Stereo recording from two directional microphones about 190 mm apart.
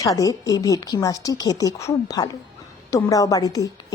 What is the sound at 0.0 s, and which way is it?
A woman's voice, 20° left (ahead or behind).